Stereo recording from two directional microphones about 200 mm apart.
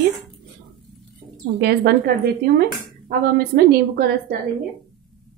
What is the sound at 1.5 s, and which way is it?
A woman's voice, 55° right (ahead or behind).